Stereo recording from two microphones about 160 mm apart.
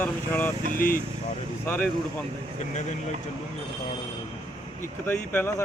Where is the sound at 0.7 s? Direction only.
60° left (ahead or behind).